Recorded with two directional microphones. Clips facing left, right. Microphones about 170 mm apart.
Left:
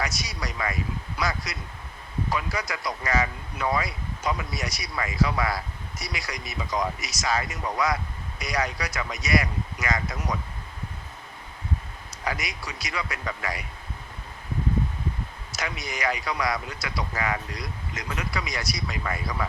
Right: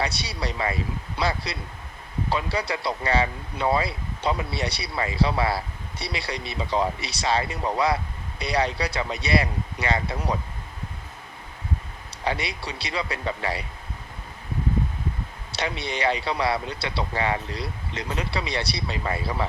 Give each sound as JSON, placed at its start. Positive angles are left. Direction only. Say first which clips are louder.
{"t": 0.0, "sound": "speech", "louder": "right 3 dB", "side_deg": -30}
{"t": 12.2, "sound": "speech", "louder": "right 4 dB", "side_deg": -30}
{"t": 15.5, "sound": "speech", "louder": "right 4 dB", "side_deg": -30}